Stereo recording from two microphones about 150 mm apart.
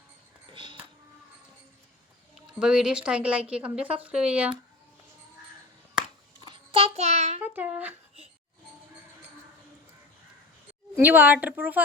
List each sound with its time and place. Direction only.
0.5 s a sound: 35° right (ahead or behind)
2.6 s speech: 5° right (ahead or behind)
6.4 s child singing: 35° right (ahead or behind)
7.4 s speech: 10° right (ahead or behind)
10.9 s speech: 10° right (ahead or behind)